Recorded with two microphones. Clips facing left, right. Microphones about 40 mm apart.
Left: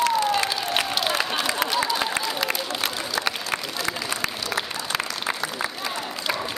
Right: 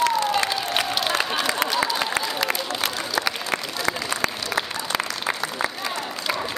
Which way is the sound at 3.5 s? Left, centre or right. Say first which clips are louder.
Right 2 dB; right.